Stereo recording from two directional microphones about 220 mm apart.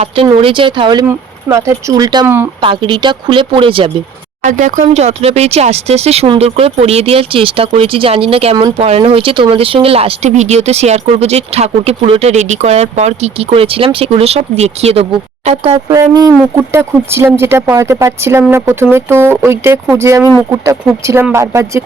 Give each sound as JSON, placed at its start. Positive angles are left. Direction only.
{"t": 0.3, "sound": "speech", "side_deg": -25}
{"t": 2.6, "sound": "speech", "side_deg": -20}
{"t": 4.4, "sound": "speech", "side_deg": -35}
{"t": 15.9, "sound": "speech", "side_deg": -15}